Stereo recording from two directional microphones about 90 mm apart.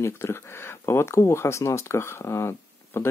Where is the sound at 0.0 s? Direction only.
25° left (ahead or behind).